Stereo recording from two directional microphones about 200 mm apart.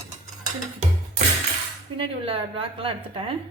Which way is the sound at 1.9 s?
25° right (ahead or behind).